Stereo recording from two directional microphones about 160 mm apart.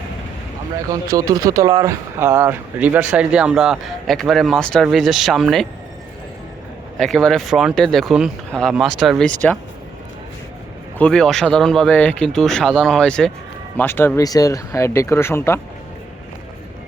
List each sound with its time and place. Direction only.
0.9 s speech: 20° right (ahead or behind); by 5.6 s centre (ahead or behind)
7.0 s speech: 5° left (ahead or behind)
10.9 s speech: 5° left (ahead or behind)